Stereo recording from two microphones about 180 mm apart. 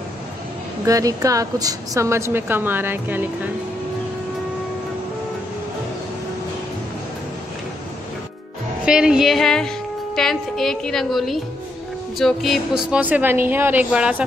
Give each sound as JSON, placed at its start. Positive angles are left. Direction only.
{"t": 0.8, "sound": "a woman's voice", "side_deg": -20}
{"t": 8.8, "sound": "a woman's voice", "side_deg": -5}